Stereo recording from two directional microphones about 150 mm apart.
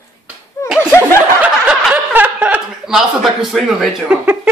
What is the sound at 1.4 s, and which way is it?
Chuckle, 10° right (ahead or behind).